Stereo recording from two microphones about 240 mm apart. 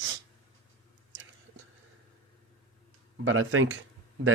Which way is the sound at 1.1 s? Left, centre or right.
Right.